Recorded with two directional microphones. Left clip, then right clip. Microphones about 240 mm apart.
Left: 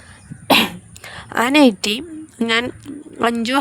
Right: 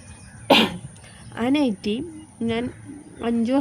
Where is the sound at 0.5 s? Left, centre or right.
Left.